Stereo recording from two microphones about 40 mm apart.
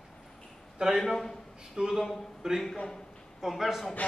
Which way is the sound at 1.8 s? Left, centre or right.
Right.